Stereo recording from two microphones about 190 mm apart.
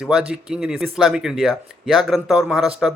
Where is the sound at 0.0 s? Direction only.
5° right (ahead or behind).